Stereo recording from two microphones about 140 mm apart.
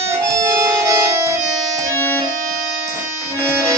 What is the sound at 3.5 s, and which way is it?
Accordion, 20° right (ahead or behind).